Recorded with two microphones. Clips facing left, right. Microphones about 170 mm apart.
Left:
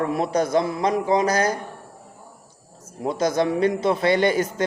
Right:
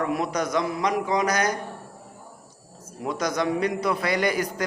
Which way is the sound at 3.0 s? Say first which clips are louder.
Left 4 dB; 30° left (ahead or behind).